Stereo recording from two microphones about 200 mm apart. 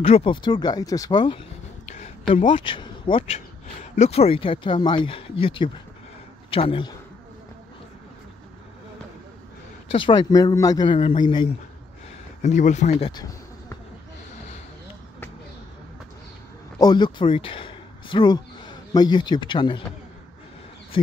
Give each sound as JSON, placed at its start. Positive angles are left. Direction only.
{"t": 0.0, "sound": "a man's voice", "side_deg": 25}
{"t": 1.9, "sound": "a man's voice", "side_deg": 35}
{"t": 9.8, "sound": "a man's voice", "side_deg": 25}
{"t": 12.4, "sound": "speech", "side_deg": 35}
{"t": 16.8, "sound": "speech", "side_deg": 20}